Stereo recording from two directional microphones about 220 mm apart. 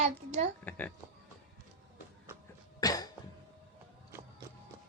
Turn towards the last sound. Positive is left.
turn(degrees=15)  # may be behind; listen again after turning